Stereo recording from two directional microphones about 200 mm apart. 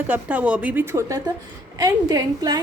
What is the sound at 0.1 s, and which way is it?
A woman's voice, 5° right (ahead or behind).